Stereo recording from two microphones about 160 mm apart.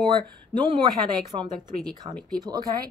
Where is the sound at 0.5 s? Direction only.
30° right (ahead or behind).